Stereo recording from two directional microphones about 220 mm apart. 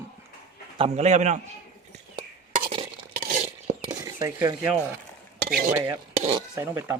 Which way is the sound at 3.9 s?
15° right (ahead or behind).